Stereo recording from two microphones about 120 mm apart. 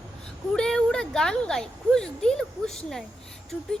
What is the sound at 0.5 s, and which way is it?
Speech, 5° left (ahead or behind).